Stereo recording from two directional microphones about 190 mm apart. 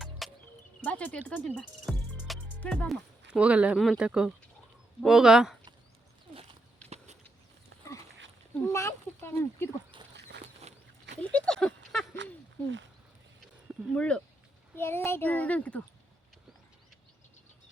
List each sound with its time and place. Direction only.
0.0 s music: centre (ahead or behind)
0.9 s speech: 5° left (ahead or behind)
8.5 s a child's voice: 15° left (ahead or behind)
11.2 s speech: 5° left (ahead or behind)
12.1 s a sound: 70° right (ahead or behind)
13.4 s a sound: centre (ahead or behind)
14.8 s a child's voice: 10° left (ahead or behind)